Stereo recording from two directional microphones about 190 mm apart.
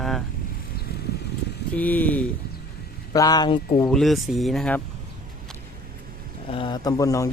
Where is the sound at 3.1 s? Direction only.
20° left (ahead or behind).